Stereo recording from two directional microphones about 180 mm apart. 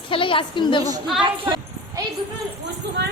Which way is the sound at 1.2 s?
25° right (ahead or behind).